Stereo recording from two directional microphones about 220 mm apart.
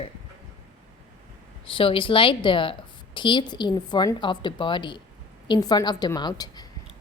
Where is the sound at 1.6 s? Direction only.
25° left (ahead or behind).